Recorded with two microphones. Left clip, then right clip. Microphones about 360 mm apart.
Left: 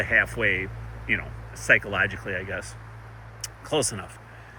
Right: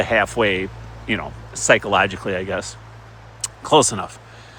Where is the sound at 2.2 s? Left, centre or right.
Right.